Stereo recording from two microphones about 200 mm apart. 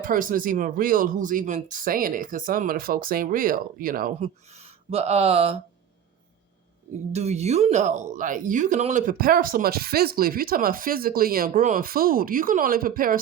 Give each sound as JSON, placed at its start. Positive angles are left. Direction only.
{"t": 0.0, "sound": "speech", "side_deg": -45}
{"t": 4.5, "sound": "speech", "side_deg": -30}
{"t": 7.1, "sound": "speech", "side_deg": -35}